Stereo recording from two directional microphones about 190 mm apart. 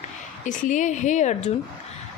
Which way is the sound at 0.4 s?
40° left (ahead or behind).